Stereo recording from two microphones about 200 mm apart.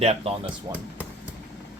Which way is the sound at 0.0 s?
30° right (ahead or behind).